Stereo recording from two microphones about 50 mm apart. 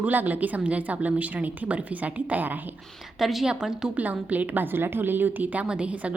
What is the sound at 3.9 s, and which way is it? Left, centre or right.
A woman's voice, right.